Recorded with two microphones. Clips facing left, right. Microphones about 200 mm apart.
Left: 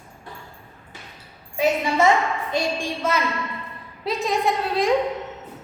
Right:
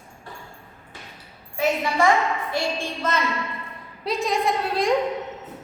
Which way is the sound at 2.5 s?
10° left (ahead or behind).